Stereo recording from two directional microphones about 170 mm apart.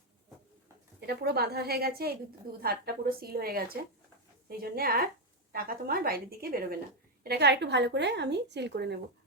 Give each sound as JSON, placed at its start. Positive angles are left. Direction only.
{"t": 1.0, "sound": "a woman's voice", "side_deg": -70}
{"t": 7.3, "sound": "a woman's voice", "side_deg": -75}